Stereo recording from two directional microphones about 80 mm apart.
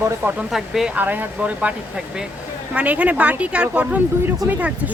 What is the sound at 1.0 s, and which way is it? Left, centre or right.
Speech, right.